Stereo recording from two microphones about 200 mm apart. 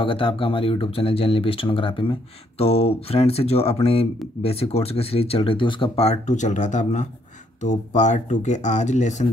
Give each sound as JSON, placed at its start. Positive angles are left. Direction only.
{"t": 0.0, "sound": "speech", "side_deg": 25}